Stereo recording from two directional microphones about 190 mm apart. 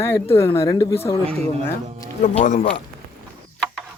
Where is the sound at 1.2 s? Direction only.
35° right (ahead or behind).